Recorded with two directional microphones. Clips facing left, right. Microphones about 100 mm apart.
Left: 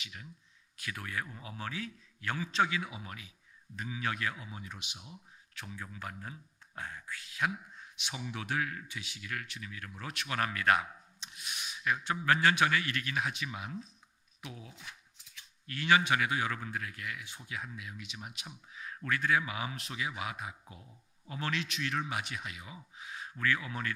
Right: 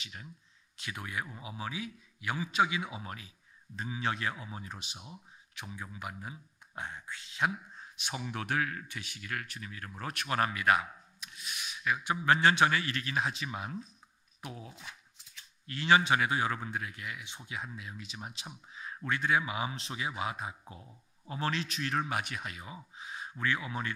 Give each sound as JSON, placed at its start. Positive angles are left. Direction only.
{"t": 0.0, "sound": "speech", "side_deg": -35}
{"t": 0.7, "sound": "a man's voice", "side_deg": -20}
{"t": 2.9, "sound": "speech", "side_deg": -35}
{"t": 5.5, "sound": "speech", "side_deg": -20}
{"t": 10.5, "sound": "a man's voice", "side_deg": -5}
{"t": 11.2, "sound": "a sound", "side_deg": 30}
{"t": 12.0, "sound": "a man's voice", "side_deg": -20}
{"t": 22.9, "sound": "a sound", "side_deg": -25}